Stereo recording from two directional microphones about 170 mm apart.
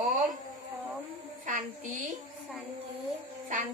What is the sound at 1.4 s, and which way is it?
Speech, 50° right (ahead or behind).